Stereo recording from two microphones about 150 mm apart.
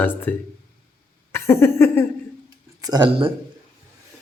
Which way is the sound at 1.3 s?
15° left (ahead or behind).